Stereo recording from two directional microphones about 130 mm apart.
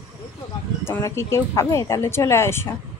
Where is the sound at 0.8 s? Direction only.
20° left (ahead or behind).